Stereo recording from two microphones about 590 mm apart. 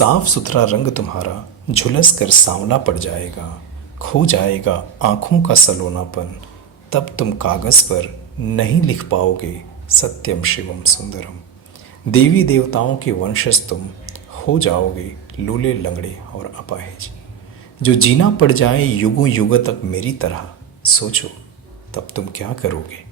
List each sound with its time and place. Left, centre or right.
0.0 s speech: left